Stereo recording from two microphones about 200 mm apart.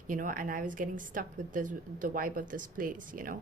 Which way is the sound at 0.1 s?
40° right (ahead or behind).